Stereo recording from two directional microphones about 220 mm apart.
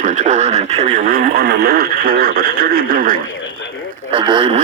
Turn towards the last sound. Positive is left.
turn(degrees=-25)  # may be behind; listen again after turning